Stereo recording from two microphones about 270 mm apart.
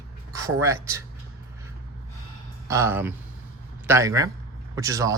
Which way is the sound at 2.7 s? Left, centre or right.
Centre.